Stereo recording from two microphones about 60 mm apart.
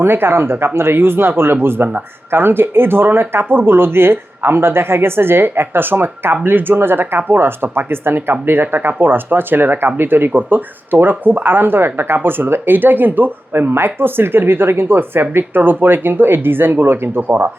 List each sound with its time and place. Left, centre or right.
0.0 s speech: right